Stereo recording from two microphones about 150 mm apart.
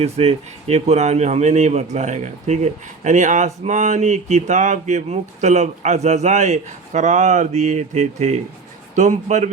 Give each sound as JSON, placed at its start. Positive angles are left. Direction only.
{"t": 0.0, "sound": "speech", "side_deg": -45}